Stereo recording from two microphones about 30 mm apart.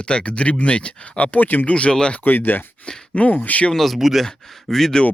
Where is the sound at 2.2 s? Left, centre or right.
Left.